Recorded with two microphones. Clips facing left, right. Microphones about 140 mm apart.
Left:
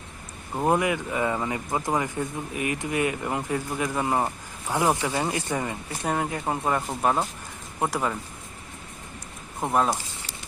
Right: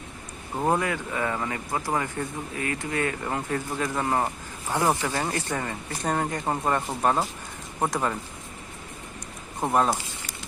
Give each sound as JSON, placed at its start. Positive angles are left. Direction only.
{"t": 0.7, "sound": "speech", "side_deg": 15}
{"t": 9.6, "sound": "speech", "side_deg": 0}